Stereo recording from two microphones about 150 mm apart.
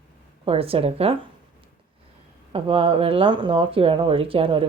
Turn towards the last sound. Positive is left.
turn(degrees=-35)  # may be behind; listen again after turning